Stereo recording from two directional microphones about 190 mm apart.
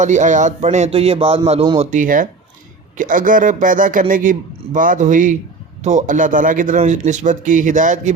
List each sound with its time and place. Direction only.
0.0 s speech: 40° right (ahead or behind)
1.9 s speech: 45° right (ahead or behind)